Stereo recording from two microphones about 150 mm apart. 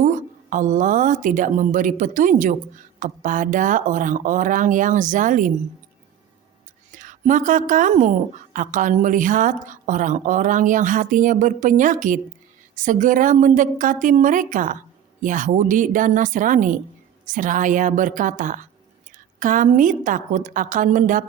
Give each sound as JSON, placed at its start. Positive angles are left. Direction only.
{"t": 0.0, "sound": "a woman's voice", "side_deg": -60}
{"t": 6.9, "sound": "a woman's voice", "side_deg": -60}